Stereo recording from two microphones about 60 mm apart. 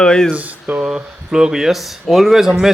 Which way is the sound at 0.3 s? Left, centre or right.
Right.